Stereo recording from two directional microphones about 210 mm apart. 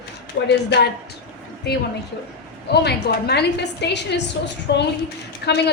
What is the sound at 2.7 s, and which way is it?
A woman's voice, 50° left (ahead or behind).